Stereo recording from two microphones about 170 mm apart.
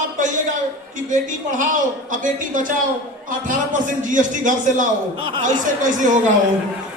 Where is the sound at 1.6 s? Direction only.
50° right (ahead or behind).